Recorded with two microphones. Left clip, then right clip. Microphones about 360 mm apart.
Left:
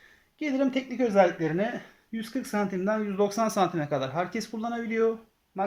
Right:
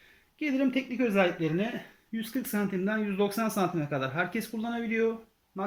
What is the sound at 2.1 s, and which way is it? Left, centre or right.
Speech, centre.